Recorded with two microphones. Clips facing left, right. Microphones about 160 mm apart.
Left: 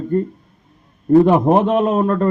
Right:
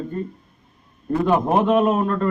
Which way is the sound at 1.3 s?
25° left (ahead or behind).